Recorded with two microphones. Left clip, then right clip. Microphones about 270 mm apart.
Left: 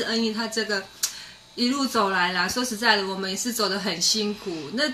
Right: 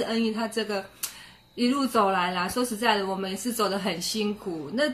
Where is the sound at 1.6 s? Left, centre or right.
Centre.